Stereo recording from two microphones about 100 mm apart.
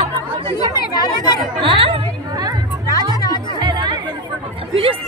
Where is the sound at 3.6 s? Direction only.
45° right (ahead or behind).